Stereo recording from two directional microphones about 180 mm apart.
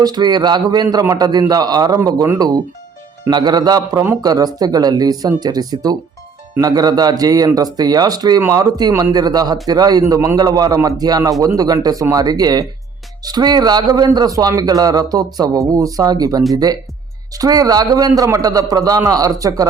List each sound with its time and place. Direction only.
0.0 s a man's voice: 20° right (ahead or behind)